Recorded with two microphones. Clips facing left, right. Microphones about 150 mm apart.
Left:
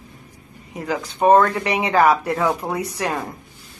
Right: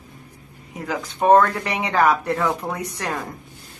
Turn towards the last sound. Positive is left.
turn(degrees=5)  # may be behind; listen again after turning